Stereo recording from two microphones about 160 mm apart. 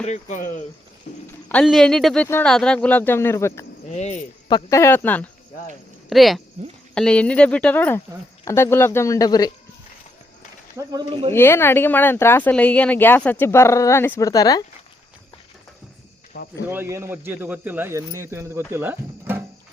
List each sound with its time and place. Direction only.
0.0 s speech: 50° left (ahead or behind)
1.6 s a man's voice: centre (ahead or behind)
3.8 s speech: 45° left (ahead or behind)
4.4 s speech: 25° left (ahead or behind)
6.1 s a man's voice: centre (ahead or behind); by 9.5 s 25° left (ahead or behind)
10.8 s speech: 30° right (ahead or behind)
11.3 s speech: 15° left (ahead or behind)
16.6 s speech: 15° right (ahead or behind)